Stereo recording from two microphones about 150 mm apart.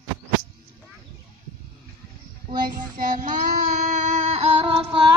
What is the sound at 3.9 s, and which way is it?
Music, 50° right (ahead or behind).